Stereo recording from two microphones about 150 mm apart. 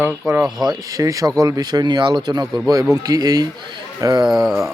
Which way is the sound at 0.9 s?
25° right (ahead or behind).